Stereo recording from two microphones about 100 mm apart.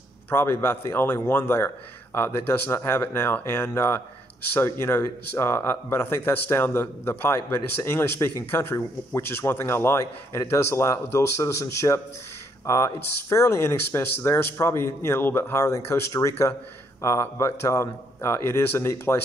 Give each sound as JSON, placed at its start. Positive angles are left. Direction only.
{"t": 0.3, "sound": "speech", "side_deg": 25}